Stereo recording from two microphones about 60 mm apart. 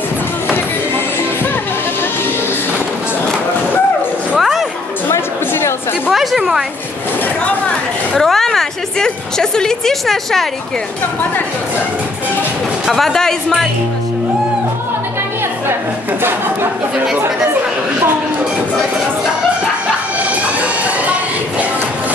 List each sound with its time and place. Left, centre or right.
0.5 s music: left
4.4 s music: centre
5.1 s music: left
6.1 s a sound: centre
8.1 s a woman's voice: centre
12.8 s a woman's voice: centre
20.2 s music: right